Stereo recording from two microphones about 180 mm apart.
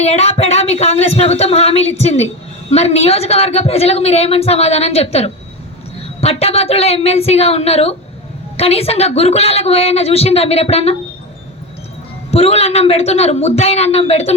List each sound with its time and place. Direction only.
0.0 s a woman's voice: 35° left (ahead or behind)
12.3 s a woman's voice: 35° left (ahead or behind)